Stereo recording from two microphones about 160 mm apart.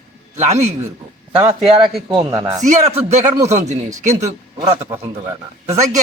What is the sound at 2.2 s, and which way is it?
Speech, 25° right (ahead or behind).